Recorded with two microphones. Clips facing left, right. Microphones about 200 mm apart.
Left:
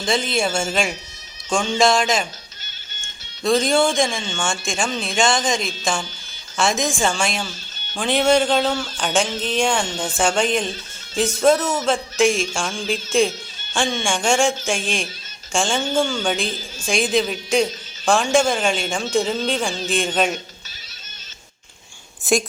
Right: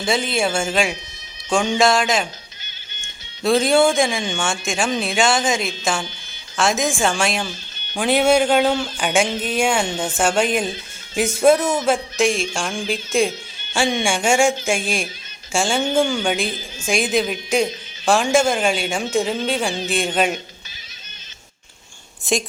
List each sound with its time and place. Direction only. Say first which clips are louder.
0.0 s a woman's voice: right 1 dB; 5° right (ahead or behind)
3.4 s a woman's voice: right 2 dB; 5° right (ahead or behind)